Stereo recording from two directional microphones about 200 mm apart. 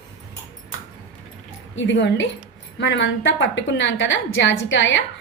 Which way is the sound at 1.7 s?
65° left (ahead or behind).